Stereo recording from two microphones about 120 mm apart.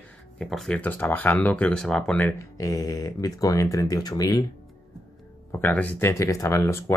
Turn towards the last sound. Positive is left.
turn(degrees=20)  # may be behind; listen again after turning